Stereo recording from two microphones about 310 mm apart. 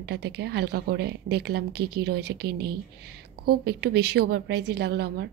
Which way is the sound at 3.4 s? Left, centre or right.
Right.